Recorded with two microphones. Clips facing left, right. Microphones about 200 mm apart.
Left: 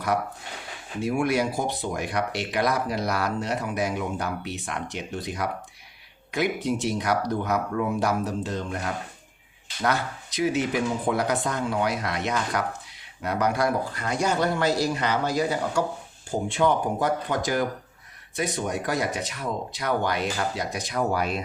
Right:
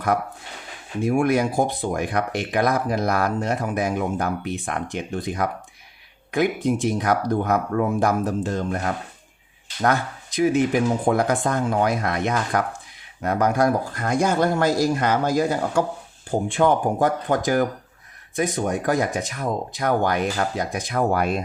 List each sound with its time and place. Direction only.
1.0 s speech: 50° right (ahead or behind)